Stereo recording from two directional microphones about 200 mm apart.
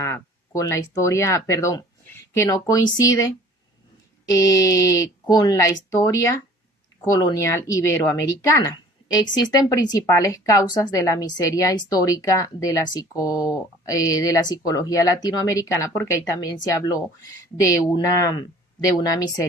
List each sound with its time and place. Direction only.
0.0 s speech: 15° left (ahead or behind)
4.3 s speech: 15° left (ahead or behind)